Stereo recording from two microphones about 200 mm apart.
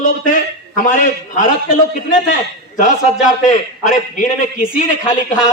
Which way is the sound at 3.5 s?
40° left (ahead or behind).